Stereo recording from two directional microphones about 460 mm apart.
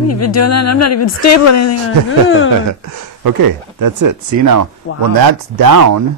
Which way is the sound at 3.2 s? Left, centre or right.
Right.